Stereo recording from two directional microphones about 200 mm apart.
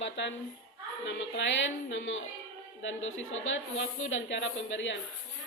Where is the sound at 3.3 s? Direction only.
70° left (ahead or behind).